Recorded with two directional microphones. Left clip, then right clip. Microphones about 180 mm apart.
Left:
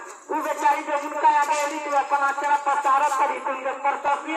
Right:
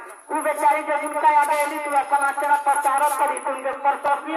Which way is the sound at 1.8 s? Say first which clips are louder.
Right 1 dB; 50° right (ahead or behind).